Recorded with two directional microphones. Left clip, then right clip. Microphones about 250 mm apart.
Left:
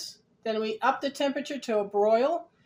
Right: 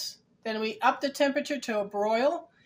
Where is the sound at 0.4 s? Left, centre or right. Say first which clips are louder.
Even; right.